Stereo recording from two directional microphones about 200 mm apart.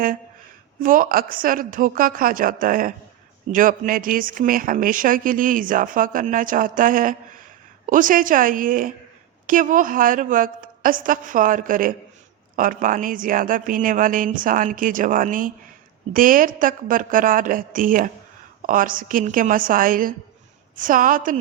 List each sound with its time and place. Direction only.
0.8 s speech: 45° right (ahead or behind)